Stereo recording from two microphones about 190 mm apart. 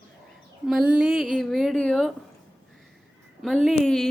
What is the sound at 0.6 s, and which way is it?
Speech, 5° right (ahead or behind).